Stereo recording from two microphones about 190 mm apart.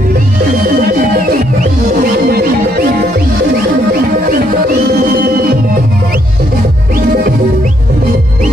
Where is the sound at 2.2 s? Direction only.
55° right (ahead or behind).